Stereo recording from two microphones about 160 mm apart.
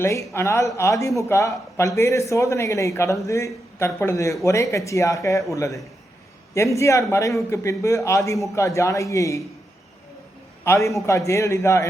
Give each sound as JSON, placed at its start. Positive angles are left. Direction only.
{"t": 0.0, "sound": "a man's voice", "side_deg": 15}
{"t": 10.6, "sound": "a man's voice", "side_deg": 20}